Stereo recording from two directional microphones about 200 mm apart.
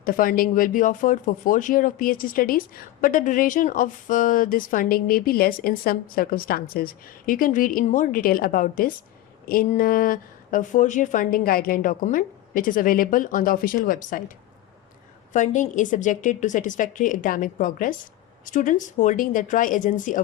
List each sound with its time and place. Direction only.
0.0 s a woman's voice: 45° left (ahead or behind)